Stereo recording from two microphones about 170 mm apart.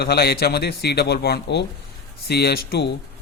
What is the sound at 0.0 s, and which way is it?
A man's voice, 70° left (ahead or behind).